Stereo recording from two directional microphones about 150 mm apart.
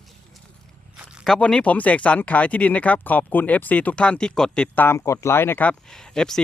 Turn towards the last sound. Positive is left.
turn(degrees=5)  # may be behind; listen again after turning